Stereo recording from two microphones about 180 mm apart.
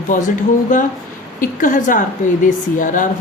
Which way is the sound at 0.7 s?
50° left (ahead or behind).